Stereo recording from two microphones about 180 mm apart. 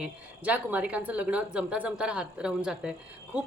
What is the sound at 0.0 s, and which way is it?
A woman's voice, 10° right (ahead or behind).